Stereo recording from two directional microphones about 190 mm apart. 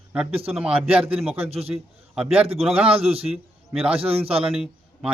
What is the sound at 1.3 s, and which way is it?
A man's voice, 30° right (ahead or behind).